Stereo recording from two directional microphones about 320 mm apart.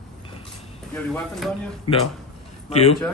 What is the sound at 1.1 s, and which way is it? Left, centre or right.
Speech, centre.